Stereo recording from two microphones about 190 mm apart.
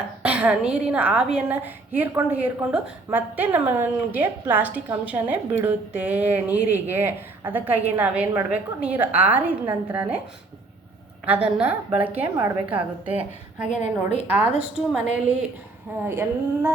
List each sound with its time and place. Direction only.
0.2 s a woman's voice: 5° right (ahead or behind)
11.3 s a woman's voice: 5° right (ahead or behind)
13.7 s a woman's voice: 40° left (ahead or behind)
14.3 s a woman's voice: 5° right (ahead or behind)